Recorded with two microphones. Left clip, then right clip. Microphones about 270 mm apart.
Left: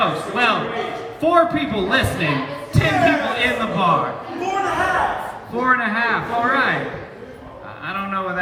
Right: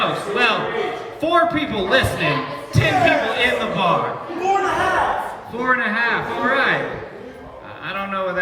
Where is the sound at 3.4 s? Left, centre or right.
Centre.